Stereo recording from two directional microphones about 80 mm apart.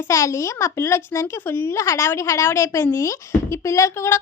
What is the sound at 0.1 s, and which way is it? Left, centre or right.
A child's voice, left.